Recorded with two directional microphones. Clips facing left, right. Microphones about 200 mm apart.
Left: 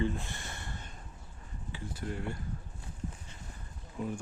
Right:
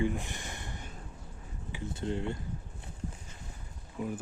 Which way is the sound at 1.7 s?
25° right (ahead or behind).